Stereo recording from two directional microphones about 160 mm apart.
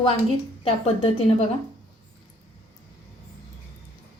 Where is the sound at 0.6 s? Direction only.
35° left (ahead or behind).